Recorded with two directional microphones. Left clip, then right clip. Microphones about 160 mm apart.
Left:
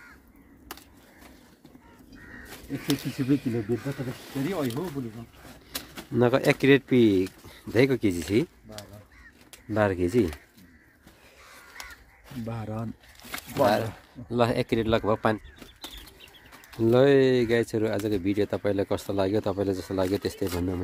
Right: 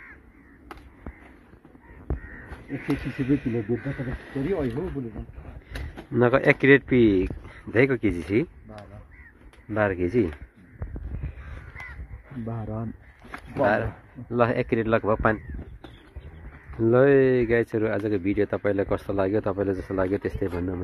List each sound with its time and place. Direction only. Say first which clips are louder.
3.0 s speech: right 1 dB; 15° left (ahead or behind)
6.1 s speech: right 3 dB; 15° left (ahead or behind)
9.7 s speech: even; 35° left (ahead or behind)
10.0 s speech: right 1 dB; 20° left (ahead or behind)
12.4 s speech: right 1 dB; 15° right (ahead or behind)
13.6 s speech: even; 20° left (ahead or behind)
16.8 s speech: right 1 dB; 15° left (ahead or behind)